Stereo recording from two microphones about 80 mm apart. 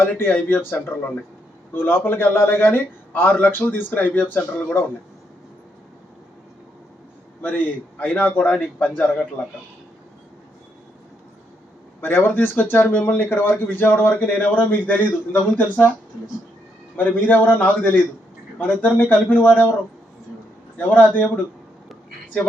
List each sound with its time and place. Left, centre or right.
0.0 s speech: left
7.4 s speech: centre
11.9 s speech: left
17.0 s speech: left
20.7 s speech: centre